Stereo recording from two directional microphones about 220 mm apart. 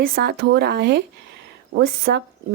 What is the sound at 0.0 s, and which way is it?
A woman's voice, 45° right (ahead or behind).